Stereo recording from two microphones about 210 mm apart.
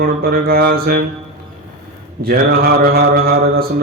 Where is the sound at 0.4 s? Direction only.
45° right (ahead or behind).